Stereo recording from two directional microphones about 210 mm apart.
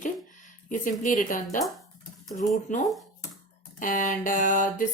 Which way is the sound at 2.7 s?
35° left (ahead or behind).